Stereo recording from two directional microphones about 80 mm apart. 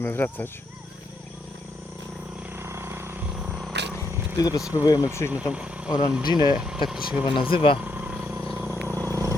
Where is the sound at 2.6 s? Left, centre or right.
Right.